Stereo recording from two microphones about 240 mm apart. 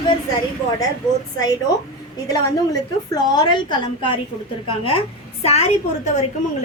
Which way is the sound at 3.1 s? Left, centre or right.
Centre.